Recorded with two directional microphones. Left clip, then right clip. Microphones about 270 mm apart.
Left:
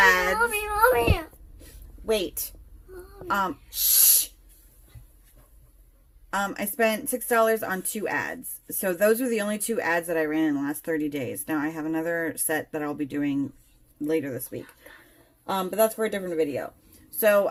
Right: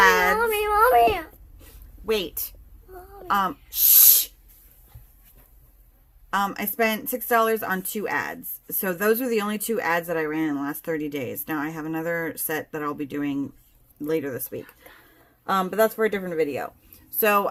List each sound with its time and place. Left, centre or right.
0.0 s baby cry: centre
0.3 s a sound: right
3.2 s speech: centre
6.3 s speech: centre